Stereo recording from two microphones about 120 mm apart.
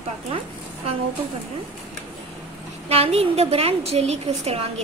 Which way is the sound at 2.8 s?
55° right (ahead or behind).